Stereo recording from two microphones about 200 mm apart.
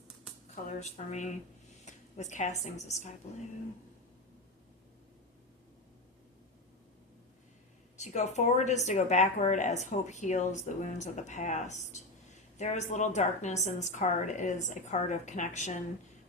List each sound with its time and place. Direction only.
0.5 s speech: 35° left (ahead or behind)
7.9 s speech: 35° left (ahead or behind)